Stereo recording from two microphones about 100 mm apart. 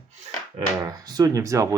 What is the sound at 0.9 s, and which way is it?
Speech, 40° right (ahead or behind).